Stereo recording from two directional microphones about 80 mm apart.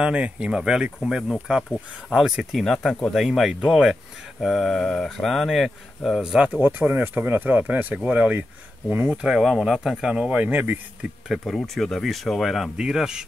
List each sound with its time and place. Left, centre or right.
0.0 s speech: centre
1.6 s speech: centre
2.1 s speech: centre
4.4 s speech: centre; by 11.1 s right
11.2 s speech: centre
12.7 s speech: centre